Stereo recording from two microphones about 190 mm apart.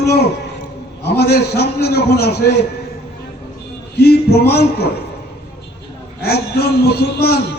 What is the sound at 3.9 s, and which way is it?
Speech, 60° left (ahead or behind).